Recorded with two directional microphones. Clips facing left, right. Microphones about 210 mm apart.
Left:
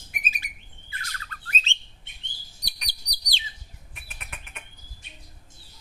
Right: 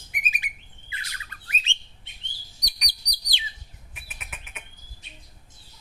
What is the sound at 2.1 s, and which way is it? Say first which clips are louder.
Chirp: even; 50° left (ahead or behind).